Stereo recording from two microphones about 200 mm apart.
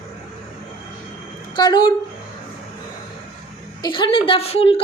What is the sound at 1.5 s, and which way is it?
Speech, 20° left (ahead or behind).